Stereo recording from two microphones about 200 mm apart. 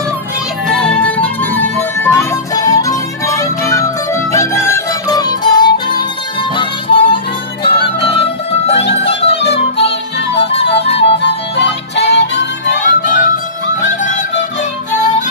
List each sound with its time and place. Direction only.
0.7 s music: 5° left (ahead or behind); by 6.0 s 20° left (ahead or behind)
6.5 s harmonica: 25° left (ahead or behind)
7.6 s music: 25° left (ahead or behind)
11.5 s music: 60° left (ahead or behind)
12.8 s music: 40° left (ahead or behind)